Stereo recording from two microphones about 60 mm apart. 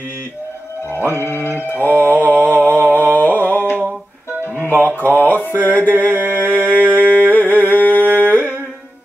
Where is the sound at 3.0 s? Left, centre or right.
Left.